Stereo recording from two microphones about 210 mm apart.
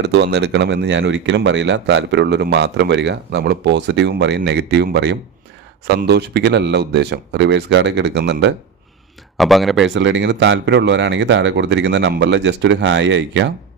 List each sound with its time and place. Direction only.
0.0 s speech: 55° right (ahead or behind)
9.4 s speech: centre (ahead or behind)
9.8 s speech: 60° right (ahead or behind)